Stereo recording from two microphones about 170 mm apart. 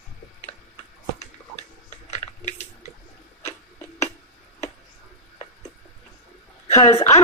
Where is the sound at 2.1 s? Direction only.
45° left (ahead or behind).